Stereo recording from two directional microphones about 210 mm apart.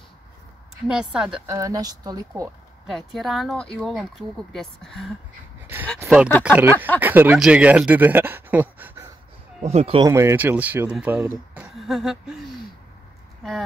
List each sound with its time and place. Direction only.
0.8 s speech: 5° right (ahead or behind)
1.5 s speech: 15° right (ahead or behind)
2.9 s speech: centre (ahead or behind)
6.4 s speech: 10° right (ahead or behind)
9.6 s speech: 30° right (ahead or behind)
10.0 s speech: 10° right (ahead or behind)